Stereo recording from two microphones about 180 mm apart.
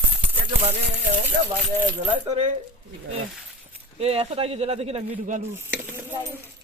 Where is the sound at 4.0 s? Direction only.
35° right (ahead or behind).